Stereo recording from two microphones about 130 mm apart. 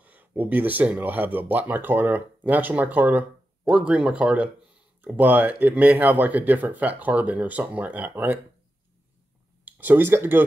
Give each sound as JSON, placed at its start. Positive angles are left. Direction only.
{"t": 0.0, "sound": "speech", "side_deg": -15}
{"t": 9.7, "sound": "speech", "side_deg": -15}